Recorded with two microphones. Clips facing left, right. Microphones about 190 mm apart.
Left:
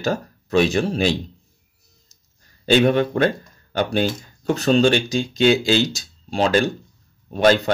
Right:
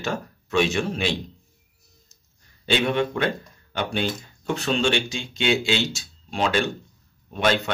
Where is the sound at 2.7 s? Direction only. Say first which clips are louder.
Left 6 dB; 40° left (ahead or behind).